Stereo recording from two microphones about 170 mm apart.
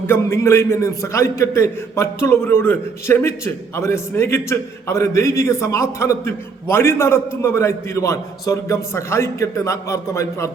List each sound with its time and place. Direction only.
0.1 s a man's voice: 15° left (ahead or behind)